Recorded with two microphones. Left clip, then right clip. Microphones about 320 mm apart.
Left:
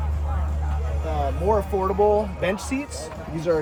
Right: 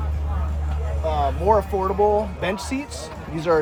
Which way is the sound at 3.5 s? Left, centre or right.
Centre.